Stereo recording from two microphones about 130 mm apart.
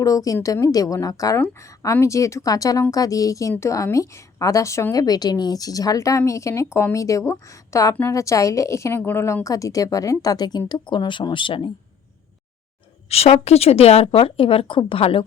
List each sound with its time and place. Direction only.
0.0 s a woman's voice: 25° left (ahead or behind)
13.1 s a woman's voice: 50° left (ahead or behind)